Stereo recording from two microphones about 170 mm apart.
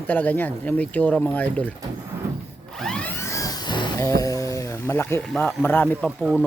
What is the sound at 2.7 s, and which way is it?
Music, 5° left (ahead or behind).